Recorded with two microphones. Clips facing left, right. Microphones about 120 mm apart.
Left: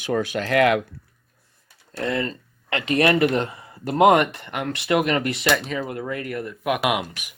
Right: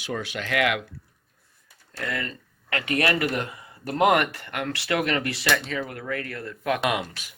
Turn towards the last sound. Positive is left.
turn(degrees=15)  # may be behind; listen again after turning